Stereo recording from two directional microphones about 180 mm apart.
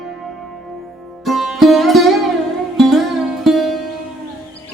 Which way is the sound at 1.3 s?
Centre (ahead or behind).